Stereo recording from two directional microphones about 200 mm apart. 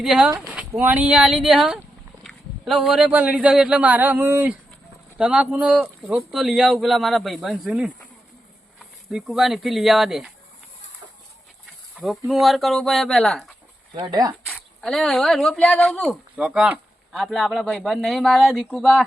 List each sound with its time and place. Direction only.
0.0 s speech: centre (ahead or behind)
9.1 s speech: centre (ahead or behind)
11.9 s speech: centre (ahead or behind)
13.9 s speech: 20° right (ahead or behind)
14.4 s speech: centre (ahead or behind)
16.4 s speech: 5° right (ahead or behind)